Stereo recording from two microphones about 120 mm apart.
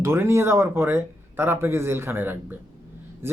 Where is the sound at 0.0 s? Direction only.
20° right (ahead or behind).